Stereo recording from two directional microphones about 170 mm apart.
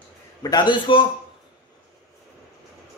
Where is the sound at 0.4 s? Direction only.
25° left (ahead or behind).